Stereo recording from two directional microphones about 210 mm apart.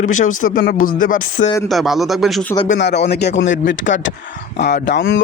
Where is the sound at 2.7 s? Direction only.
55° left (ahead or behind).